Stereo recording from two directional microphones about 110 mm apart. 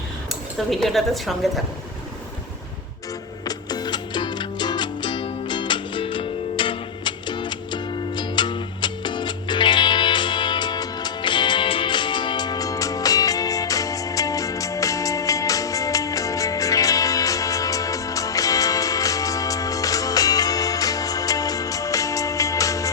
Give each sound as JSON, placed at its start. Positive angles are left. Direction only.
{"t": 0.7, "sound": "a woman's voice", "side_deg": 0}
{"t": 3.4, "sound": "music", "side_deg": 35}